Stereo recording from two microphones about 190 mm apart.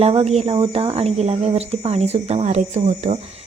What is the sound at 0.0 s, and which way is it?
Speech, 35° right (ahead or behind).